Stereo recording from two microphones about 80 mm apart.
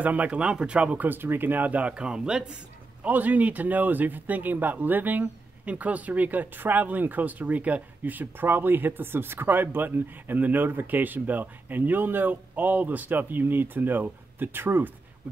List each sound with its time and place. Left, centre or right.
0.0 s speech: centre